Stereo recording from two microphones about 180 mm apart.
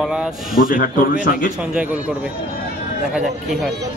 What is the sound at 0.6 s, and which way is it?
Speech, 50° left (ahead or behind).